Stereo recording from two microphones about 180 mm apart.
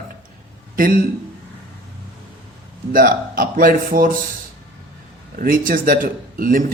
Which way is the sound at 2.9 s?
50° right (ahead or behind).